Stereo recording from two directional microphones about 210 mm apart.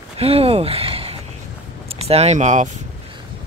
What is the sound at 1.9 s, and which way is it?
Speech, 30° right (ahead or behind).